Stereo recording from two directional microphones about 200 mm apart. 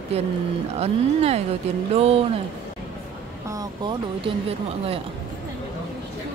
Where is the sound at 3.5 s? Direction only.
20° right (ahead or behind).